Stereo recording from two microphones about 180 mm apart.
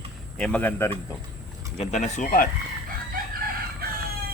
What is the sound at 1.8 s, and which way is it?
Speech, 40° left (ahead or behind).